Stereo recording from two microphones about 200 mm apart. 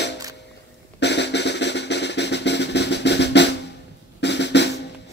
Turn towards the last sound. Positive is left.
turn(degrees=60)  # may be behind; listen again after turning